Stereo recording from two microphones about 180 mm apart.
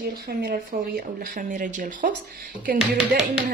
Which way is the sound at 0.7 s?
50° right (ahead or behind).